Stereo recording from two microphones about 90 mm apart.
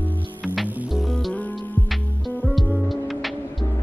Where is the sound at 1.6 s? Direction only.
20° left (ahead or behind).